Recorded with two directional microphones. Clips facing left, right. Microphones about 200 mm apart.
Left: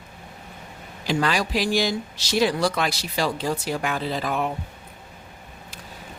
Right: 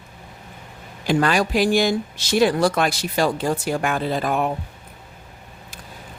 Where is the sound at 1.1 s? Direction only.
50° right (ahead or behind).